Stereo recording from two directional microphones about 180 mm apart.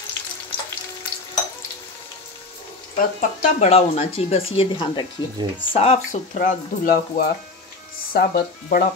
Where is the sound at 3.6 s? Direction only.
35° left (ahead or behind); by 8.9 s 55° left (ahead or behind).